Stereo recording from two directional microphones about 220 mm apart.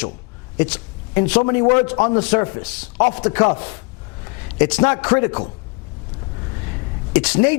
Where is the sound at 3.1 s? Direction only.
15° left (ahead or behind).